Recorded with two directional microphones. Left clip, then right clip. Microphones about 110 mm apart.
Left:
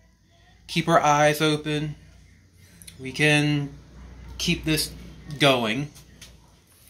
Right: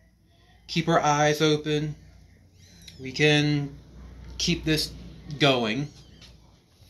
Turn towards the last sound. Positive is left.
turn(degrees=15)  # may be behind; listen again after turning